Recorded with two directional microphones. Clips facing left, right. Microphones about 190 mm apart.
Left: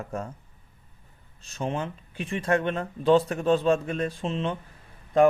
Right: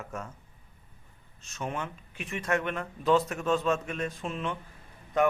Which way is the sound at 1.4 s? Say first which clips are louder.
Left 5 dB; 30° left (ahead or behind).